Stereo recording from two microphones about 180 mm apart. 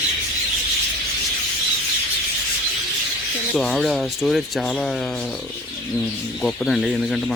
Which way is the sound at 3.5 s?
Centre (ahead or behind).